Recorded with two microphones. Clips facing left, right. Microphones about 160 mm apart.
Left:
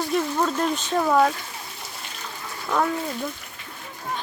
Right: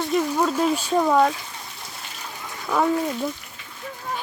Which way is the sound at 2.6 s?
5° right (ahead or behind).